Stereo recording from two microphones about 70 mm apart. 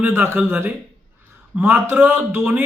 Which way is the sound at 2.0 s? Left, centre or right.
Right.